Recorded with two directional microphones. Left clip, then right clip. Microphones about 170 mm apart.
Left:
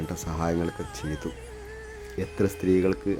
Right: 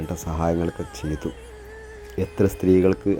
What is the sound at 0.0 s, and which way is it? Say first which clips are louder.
Speech: right 5 dB; 10° right (ahead or behind).